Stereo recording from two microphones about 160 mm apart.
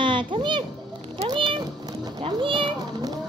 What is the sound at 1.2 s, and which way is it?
Cat, 30° right (ahead or behind).